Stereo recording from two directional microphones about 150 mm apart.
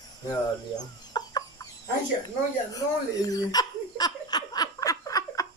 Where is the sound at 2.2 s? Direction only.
25° left (ahead or behind).